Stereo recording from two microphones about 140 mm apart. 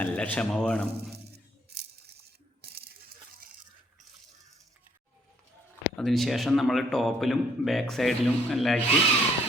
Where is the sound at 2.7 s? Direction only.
90° right.